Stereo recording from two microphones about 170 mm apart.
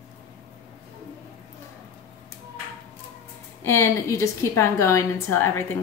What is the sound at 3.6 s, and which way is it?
A woman's voice, 15° left (ahead or behind).